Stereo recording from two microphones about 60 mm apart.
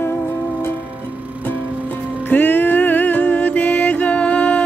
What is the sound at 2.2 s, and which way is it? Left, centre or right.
Music, left.